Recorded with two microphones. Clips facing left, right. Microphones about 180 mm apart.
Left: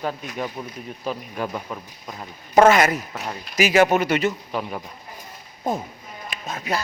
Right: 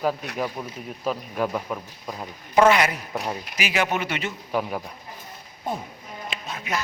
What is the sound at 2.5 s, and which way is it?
A man's voice, 45° left (ahead or behind).